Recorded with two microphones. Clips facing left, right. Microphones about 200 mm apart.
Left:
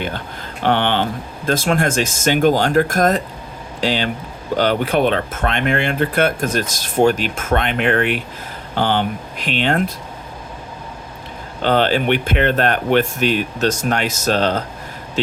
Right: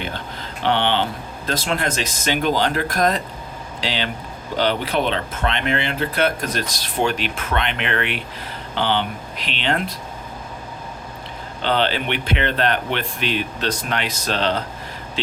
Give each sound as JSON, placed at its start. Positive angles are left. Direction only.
{"t": 0.6, "sound": "speech", "side_deg": 50}
{"t": 11.6, "sound": "speech", "side_deg": 45}